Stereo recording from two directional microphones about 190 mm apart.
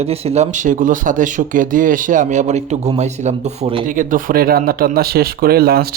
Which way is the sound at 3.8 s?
45° right (ahead or behind).